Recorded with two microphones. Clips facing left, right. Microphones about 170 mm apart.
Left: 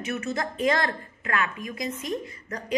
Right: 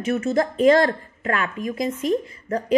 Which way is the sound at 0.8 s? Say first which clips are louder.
Right 8 dB; 40° right (ahead or behind).